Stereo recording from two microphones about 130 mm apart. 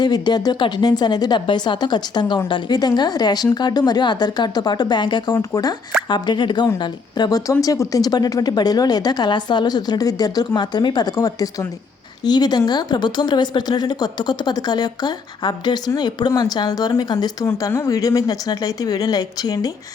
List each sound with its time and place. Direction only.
0.0 s speech: 30° left (ahead or behind)